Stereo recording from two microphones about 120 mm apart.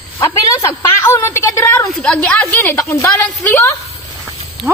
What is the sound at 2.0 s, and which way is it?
A woman's voice, 10° left (ahead or behind).